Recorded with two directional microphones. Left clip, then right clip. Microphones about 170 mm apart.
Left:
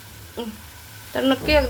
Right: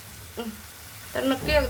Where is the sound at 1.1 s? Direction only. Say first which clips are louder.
Left 5 dB; 15° left (ahead or behind).